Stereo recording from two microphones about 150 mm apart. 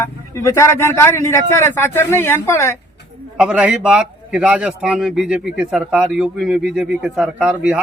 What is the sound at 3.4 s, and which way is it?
A man's voice, 5° right (ahead or behind).